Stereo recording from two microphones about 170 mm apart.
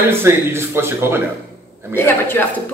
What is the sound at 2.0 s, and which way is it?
Speech, 15° left (ahead or behind).